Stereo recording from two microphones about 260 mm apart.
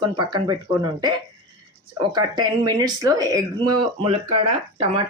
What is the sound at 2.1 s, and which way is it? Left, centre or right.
Speech, centre.